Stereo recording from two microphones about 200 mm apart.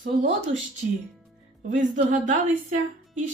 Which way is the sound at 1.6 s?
40° right (ahead or behind).